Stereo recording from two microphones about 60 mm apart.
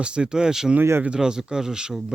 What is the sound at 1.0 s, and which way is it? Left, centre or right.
Speech, centre.